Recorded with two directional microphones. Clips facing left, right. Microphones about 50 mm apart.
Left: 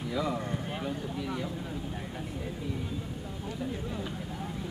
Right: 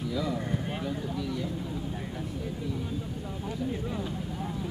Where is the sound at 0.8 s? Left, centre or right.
Left.